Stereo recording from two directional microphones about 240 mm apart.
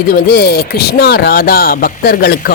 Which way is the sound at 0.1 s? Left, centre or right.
Left.